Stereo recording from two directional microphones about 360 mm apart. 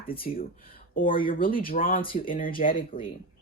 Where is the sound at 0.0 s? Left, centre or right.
Left.